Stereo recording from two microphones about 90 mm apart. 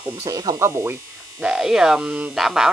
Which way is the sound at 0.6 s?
30° right (ahead or behind).